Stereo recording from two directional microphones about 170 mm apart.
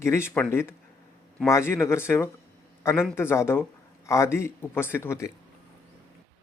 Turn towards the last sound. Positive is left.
turn(degrees=15)  # may be behind; listen again after turning